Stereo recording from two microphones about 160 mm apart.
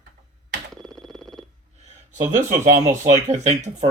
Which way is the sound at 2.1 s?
50° right (ahead or behind).